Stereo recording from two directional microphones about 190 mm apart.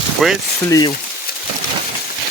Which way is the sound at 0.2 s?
Centre (ahead or behind).